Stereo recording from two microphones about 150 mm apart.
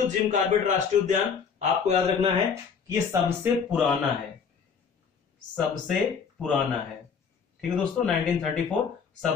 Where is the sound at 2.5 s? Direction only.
15° right (ahead or behind).